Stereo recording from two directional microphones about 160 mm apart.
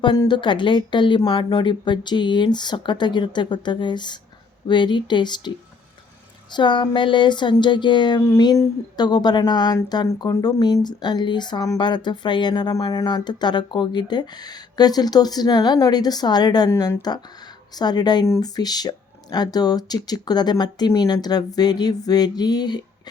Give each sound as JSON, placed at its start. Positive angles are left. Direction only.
{"t": 0.0, "sound": "speech", "side_deg": 30}
{"t": 6.5, "sound": "speech", "side_deg": 30}